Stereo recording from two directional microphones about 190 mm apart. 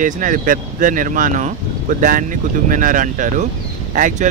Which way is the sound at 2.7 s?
45° right (ahead or behind).